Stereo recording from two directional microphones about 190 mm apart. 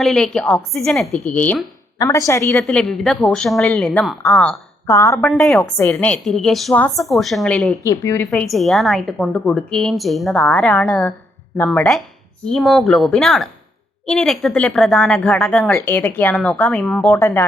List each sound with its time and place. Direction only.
0.0 s a woman's voice: centre (ahead or behind)
2.0 s a woman's voice: 20° left (ahead or behind)
2.6 s a woman's voice: 5° left (ahead or behind)
5.3 s a woman's voice: centre (ahead or behind)